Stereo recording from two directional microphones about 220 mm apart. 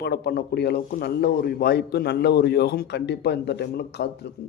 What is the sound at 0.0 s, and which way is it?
A man's voice, 45° left (ahead or behind).